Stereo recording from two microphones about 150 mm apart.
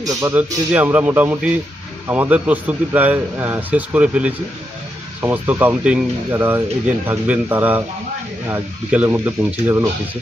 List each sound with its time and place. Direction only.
0.0 s speech: 20° right (ahead or behind)
0.7 s speech: 10° right (ahead or behind)